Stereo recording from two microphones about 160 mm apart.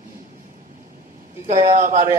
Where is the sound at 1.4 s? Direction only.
45° right (ahead or behind).